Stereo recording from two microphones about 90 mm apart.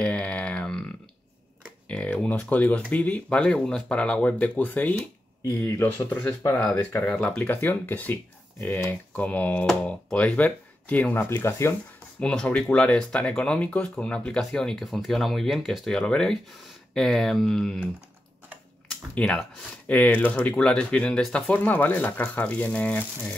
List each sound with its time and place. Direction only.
0.0 s a sound: 10° left (ahead or behind)
1.9 s a sound: 15° left (ahead or behind)
2.9 s speech: 15° left (ahead or behind)
12.2 s speech: 10° left (ahead or behind)
19.1 s speech: 10° left (ahead or behind)
21.5 s speech: 20° left (ahead or behind)